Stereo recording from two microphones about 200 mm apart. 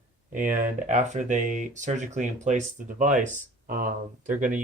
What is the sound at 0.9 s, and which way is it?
Speech, 40° right (ahead or behind).